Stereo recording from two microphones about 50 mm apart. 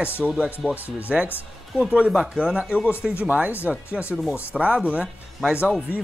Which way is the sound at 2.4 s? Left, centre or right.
Right.